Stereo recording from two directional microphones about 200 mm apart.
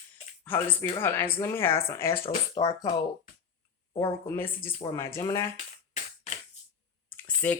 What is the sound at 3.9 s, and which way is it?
Speech, 20° left (ahead or behind).